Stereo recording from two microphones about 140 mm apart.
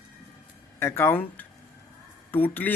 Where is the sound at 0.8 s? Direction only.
15° left (ahead or behind).